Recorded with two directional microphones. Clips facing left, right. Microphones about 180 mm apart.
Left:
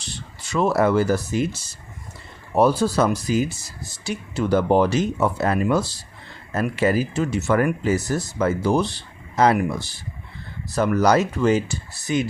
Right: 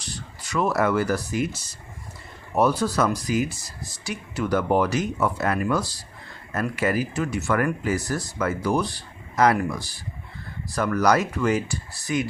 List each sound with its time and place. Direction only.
0.0 s speech: 25° left (ahead or behind)